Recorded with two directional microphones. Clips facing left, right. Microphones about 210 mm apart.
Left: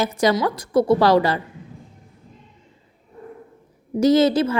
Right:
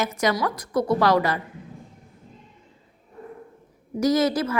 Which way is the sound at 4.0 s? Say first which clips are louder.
Left 5 dB; 25° left (ahead or behind).